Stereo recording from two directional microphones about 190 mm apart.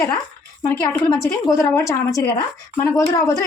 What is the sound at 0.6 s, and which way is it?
A woman's voice, 10° left (ahead or behind).